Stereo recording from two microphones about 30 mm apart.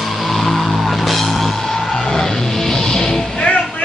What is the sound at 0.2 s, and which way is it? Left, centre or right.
Music, centre.